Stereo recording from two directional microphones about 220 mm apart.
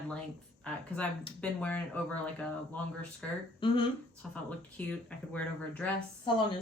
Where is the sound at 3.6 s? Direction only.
20° left (ahead or behind).